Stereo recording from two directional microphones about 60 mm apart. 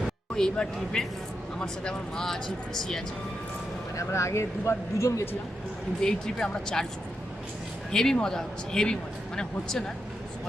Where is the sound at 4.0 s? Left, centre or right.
Left.